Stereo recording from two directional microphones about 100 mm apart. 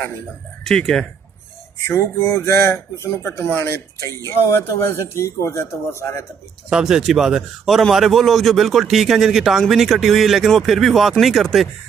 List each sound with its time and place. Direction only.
0.7 s a man's voice: 5° left (ahead or behind)
1.9 s speech: 25° left (ahead or behind)
6.7 s a man's voice: 5° right (ahead or behind)